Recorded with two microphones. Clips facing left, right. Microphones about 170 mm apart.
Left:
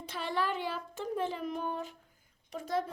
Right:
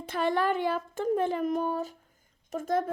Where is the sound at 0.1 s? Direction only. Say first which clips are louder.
Right 7 dB; 50° right (ahead or behind).